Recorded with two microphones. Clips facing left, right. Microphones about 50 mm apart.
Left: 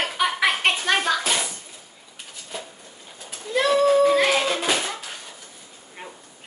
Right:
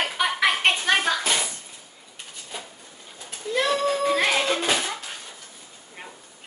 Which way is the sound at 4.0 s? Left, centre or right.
Centre.